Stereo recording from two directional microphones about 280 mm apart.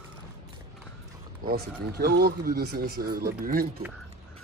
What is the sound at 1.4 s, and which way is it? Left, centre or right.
Speech, right.